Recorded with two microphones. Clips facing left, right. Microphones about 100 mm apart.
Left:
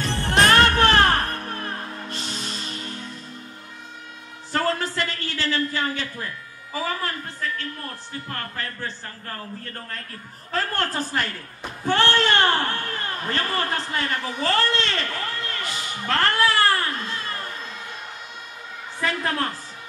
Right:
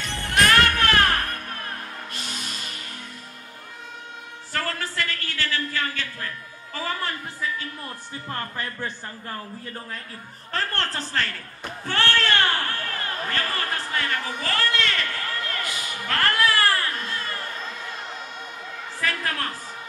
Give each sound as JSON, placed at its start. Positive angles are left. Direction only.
{"t": 0.0, "sound": "music", "side_deg": 35}
{"t": 4.5, "sound": "a sound", "side_deg": 25}
{"t": 7.0, "sound": "a woman's voice", "side_deg": 0}
{"t": 8.3, "sound": "speech", "side_deg": -20}
{"t": 10.5, "sound": "a woman's voice", "side_deg": 5}
{"t": 18.9, "sound": "a woman's voice", "side_deg": 25}